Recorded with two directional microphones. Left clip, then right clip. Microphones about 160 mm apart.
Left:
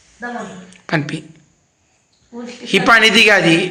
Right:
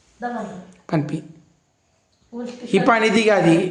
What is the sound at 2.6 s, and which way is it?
A woman's voice, 10° right (ahead or behind).